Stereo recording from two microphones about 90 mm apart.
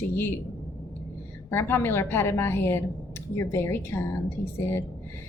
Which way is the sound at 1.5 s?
25° left (ahead or behind).